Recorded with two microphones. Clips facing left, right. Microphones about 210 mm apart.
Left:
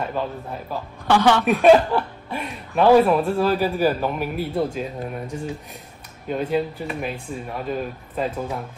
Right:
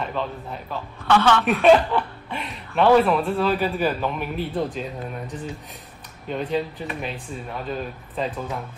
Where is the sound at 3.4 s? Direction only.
40° left (ahead or behind).